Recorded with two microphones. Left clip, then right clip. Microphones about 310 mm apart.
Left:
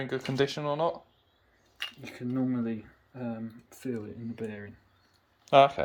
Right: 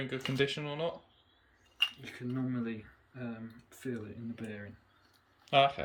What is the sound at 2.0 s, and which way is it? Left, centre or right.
Speech, left.